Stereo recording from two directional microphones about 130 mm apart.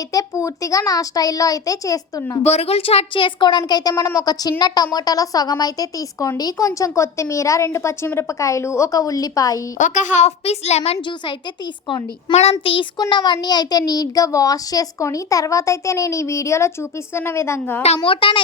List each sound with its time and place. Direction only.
0.1 s speech: 25° left (ahead or behind)
2.4 s speech: 55° left (ahead or behind); by 9.6 s 25° left (ahead or behind)
9.7 s a woman's voice: 75° left (ahead or behind); by 10.9 s 55° left (ahead or behind)
12.3 s a child's voice: 55° left (ahead or behind)
13.0 s speech: 35° left (ahead or behind); by 17.8 s 20° left (ahead or behind)
17.8 s a child's voice: 50° left (ahead or behind)